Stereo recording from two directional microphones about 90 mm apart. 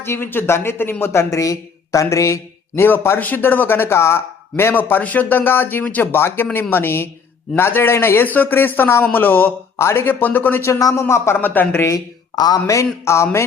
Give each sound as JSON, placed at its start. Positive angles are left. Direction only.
{"t": 0.0, "sound": "speech", "side_deg": 25}
{"t": 10.8, "sound": "speech", "side_deg": 40}
{"t": 11.0, "sound": "speech", "side_deg": 25}
{"t": 12.4, "sound": "speech", "side_deg": 40}